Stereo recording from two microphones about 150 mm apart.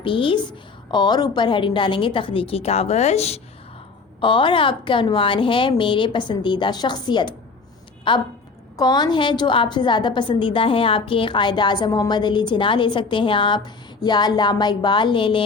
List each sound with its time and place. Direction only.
0.0 s a woman's voice: 35° left (ahead or behind)
4.2 s a woman's voice: 35° left (ahead or behind)